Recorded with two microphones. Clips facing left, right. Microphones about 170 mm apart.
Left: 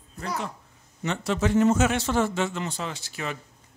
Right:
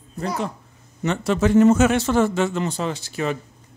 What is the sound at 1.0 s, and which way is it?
A man's voice, 55° right (ahead or behind).